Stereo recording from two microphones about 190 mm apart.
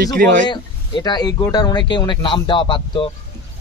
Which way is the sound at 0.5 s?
20° left (ahead or behind).